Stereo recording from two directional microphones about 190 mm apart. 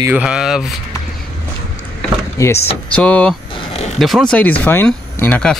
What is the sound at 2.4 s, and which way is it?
Speech, 15° left (ahead or behind).